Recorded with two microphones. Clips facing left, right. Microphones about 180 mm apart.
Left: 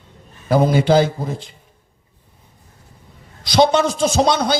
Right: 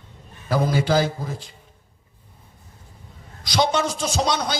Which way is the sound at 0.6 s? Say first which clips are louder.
Left 5 dB; 25° left (ahead or behind).